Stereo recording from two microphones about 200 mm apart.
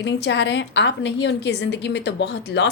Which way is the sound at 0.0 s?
65° left (ahead or behind).